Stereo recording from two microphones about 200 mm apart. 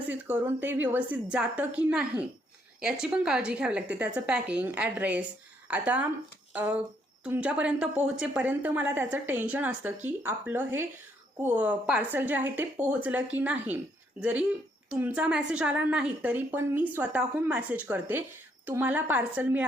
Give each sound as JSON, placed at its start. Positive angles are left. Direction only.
{"t": 0.1, "sound": "a woman's voice", "side_deg": -10}